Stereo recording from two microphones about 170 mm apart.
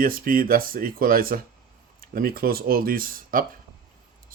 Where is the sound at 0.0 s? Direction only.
55° right (ahead or behind).